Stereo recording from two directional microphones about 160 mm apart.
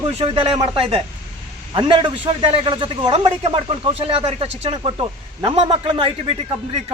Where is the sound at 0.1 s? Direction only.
40° right (ahead or behind).